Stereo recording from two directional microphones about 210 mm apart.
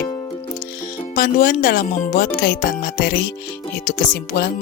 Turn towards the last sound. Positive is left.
turn(degrees=45)  # may be behind; listen again after turning